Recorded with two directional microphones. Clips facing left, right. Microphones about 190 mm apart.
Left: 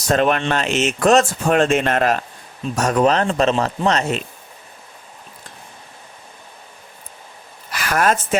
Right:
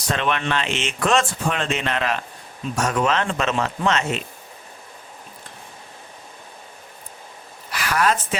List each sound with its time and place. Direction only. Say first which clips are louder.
0.1 s speech: left 6 dB; 45° left (ahead or behind)
7.7 s speech: left 3 dB; 45° left (ahead or behind)